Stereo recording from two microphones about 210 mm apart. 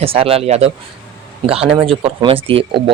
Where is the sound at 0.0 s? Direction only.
25° right (ahead or behind).